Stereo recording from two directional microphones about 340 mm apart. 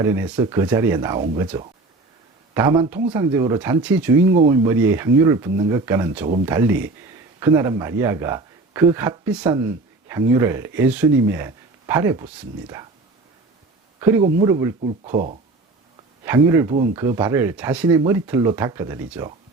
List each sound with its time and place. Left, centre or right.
0.0 s speech: centre
14.0 s speech: centre
15.1 s speech: right
16.2 s speech: centre